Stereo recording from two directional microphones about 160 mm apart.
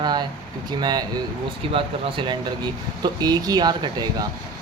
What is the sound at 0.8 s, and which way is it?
Speech, 25° right (ahead or behind).